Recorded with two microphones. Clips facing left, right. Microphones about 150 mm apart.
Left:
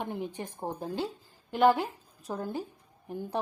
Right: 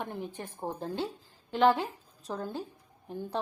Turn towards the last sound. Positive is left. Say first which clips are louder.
# left 1 dB
turn(degrees=10)  # may be behind; listen again after turning